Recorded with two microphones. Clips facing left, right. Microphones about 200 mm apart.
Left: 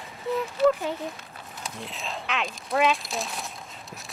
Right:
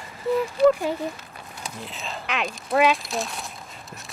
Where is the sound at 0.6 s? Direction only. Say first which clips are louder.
Right 3 dB; 10° right (ahead or behind).